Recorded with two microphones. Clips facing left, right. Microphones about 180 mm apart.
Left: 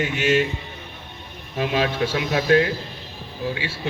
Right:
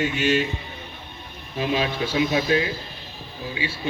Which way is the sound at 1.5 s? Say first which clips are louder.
Left 2 dB; 60° left (ahead or behind).